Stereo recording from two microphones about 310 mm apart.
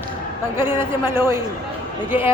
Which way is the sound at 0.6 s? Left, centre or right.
Centre.